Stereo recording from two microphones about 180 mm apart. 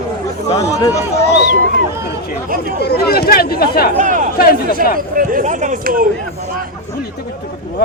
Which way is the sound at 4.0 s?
45° right (ahead or behind).